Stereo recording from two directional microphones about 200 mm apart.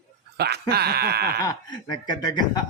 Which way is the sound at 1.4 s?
20° left (ahead or behind).